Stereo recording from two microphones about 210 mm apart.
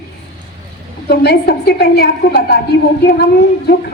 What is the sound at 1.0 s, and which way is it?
A woman's voice, 50° left (ahead or behind).